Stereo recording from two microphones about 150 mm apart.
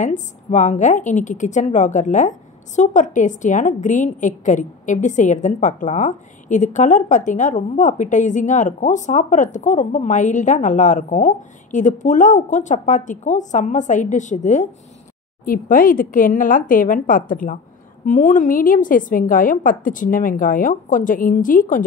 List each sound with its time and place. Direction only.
0.0 s a woman's voice: 55° left (ahead or behind)
15.4 s a woman's voice: 70° left (ahead or behind)